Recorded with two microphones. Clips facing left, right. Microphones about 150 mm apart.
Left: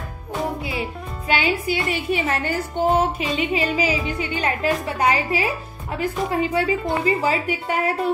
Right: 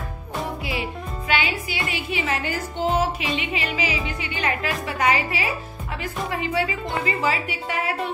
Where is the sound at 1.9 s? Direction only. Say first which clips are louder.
Left 1 dB; 45° left (ahead or behind).